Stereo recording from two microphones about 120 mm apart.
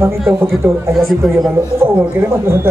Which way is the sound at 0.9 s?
Centre (ahead or behind).